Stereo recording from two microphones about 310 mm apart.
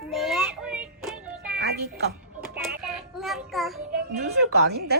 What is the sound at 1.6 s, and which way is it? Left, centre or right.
Music, right.